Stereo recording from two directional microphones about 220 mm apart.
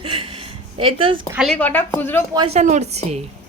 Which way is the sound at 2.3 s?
25° right (ahead or behind).